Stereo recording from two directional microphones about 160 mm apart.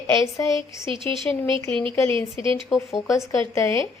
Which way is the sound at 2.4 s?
30° right (ahead or behind).